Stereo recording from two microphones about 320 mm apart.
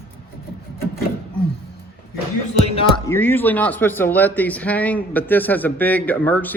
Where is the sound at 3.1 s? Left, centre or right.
Centre.